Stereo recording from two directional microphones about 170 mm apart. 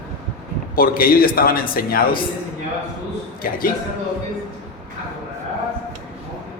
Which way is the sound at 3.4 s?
55° left (ahead or behind).